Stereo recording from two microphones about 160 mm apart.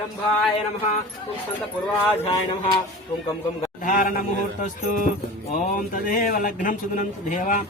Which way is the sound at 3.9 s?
60° left (ahead or behind).